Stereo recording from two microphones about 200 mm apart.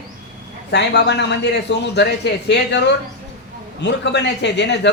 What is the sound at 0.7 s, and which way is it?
Speech, 60° left (ahead or behind).